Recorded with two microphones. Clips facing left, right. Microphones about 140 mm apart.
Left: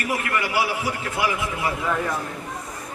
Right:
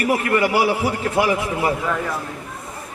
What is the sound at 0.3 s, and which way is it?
A man's voice, 35° right (ahead or behind).